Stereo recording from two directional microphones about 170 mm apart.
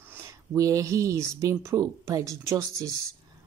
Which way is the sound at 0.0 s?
15° right (ahead or behind).